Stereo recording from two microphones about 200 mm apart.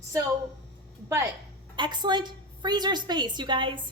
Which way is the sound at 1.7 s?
20° right (ahead or behind).